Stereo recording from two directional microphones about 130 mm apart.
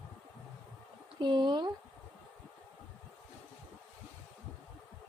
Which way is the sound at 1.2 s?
35° right (ahead or behind).